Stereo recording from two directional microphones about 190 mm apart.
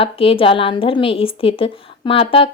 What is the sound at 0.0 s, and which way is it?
Speech, 30° left (ahead or behind).